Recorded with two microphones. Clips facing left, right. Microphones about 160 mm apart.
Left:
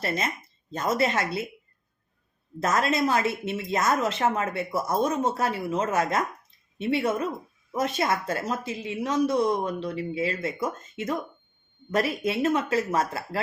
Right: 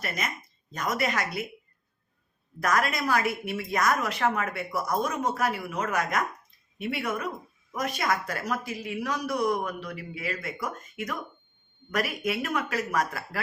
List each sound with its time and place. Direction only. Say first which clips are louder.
0.0 s a woman's voice: left 5 dB; 30° left (ahead or behind)
2.6 s a woman's voice: left 3 dB; 25° left (ahead or behind)